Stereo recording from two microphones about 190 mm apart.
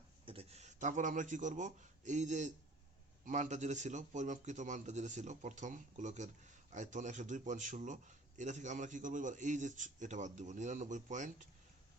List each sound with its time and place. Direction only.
0.3 s a man's voice: 30° right (ahead or behind)